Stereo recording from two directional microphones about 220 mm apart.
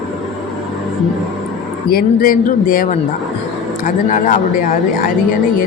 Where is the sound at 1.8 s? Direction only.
40° left (ahead or behind).